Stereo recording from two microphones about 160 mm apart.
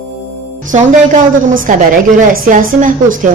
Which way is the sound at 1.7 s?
50° right (ahead or behind).